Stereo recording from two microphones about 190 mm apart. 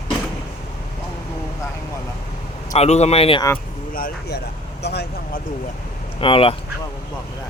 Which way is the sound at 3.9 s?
50° left (ahead or behind).